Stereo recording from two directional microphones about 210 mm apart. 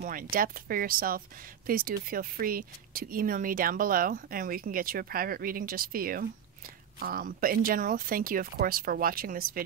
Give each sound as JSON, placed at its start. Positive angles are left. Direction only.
{"t": 0.0, "sound": "speech", "side_deg": -45}